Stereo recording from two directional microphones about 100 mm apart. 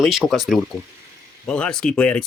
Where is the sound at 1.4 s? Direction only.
10° left (ahead or behind).